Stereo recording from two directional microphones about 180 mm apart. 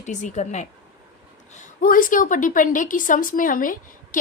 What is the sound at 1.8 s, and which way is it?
Speech, 50° left (ahead or behind).